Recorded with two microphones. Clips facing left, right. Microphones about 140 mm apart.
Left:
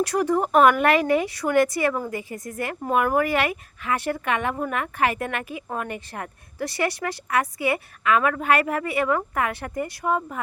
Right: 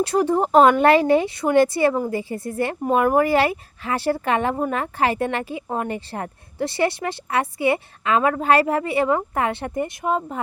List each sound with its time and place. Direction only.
0.0 s speech: 25° right (ahead or behind)